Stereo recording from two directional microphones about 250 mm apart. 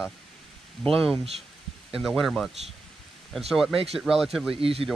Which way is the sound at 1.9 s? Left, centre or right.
Centre.